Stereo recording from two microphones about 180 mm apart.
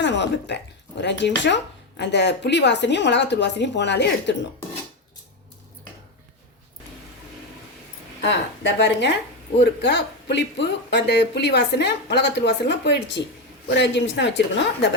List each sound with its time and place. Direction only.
0.0 s a sound: 75° left (ahead or behind)
1.5 s speech: 75° left (ahead or behind)
8.6 s a woman's voice: 75° left (ahead or behind)